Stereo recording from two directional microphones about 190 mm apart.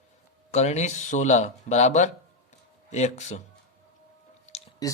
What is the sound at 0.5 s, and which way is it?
Speech, 35° left (ahead or behind).